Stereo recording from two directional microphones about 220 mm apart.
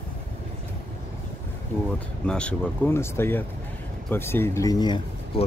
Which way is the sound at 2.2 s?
5° left (ahead or behind).